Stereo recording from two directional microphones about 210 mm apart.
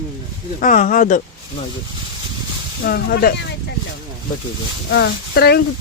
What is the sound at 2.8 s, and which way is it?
Speech, 45° left (ahead or behind).